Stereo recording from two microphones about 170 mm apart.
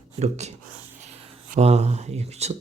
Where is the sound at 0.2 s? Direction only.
40° right (ahead or behind).